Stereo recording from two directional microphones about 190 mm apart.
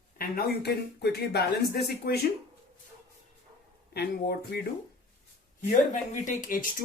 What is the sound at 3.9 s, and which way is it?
Speech, 55° left (ahead or behind).